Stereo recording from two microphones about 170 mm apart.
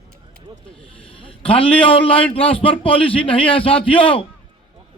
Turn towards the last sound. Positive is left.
turn(degrees=30)  # may be behind; listen again after turning